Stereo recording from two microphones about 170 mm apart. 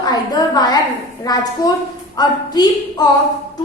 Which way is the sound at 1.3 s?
25° left (ahead or behind).